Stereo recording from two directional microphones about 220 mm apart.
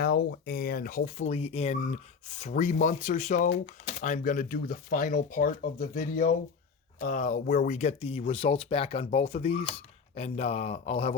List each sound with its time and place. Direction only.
0.0 s speech: 50° left (ahead or behind); by 11.1 s 25° left (ahead or behind)